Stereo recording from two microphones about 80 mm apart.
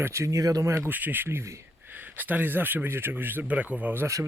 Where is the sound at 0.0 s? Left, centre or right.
Right.